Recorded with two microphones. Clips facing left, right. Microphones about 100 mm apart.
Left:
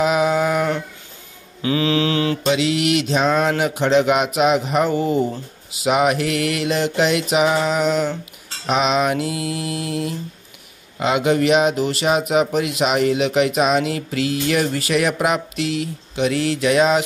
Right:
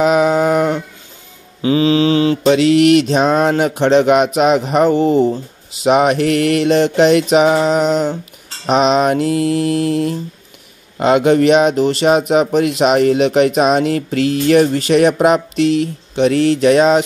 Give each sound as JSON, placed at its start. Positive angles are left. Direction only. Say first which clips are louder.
{"t": 0.0, "sound": "a sound", "louder": "right 5 dB", "side_deg": -40}
{"t": 1.6, "sound": "mantra", "louder": "right 6 dB", "side_deg": -30}
{"t": 2.4, "sound": "speech", "louder": "right 11 dB", "side_deg": -45}
{"t": 4.9, "sound": "speech", "louder": "right 7 dB", "side_deg": -30}